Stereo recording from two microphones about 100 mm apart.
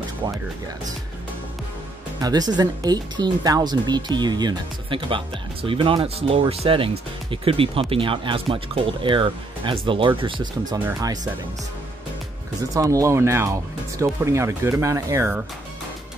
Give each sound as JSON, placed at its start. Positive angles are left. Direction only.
{"t": 0.2, "sound": "speech", "side_deg": -50}
{"t": 2.2, "sound": "speech", "side_deg": -40}
{"t": 10.7, "sound": "speech", "side_deg": -40}
{"t": 12.7, "sound": "speech", "side_deg": -35}